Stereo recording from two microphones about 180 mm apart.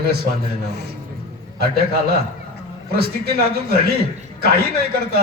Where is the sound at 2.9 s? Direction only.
60° right (ahead or behind).